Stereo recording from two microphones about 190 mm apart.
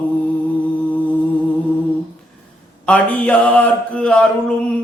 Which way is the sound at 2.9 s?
10° left (ahead or behind).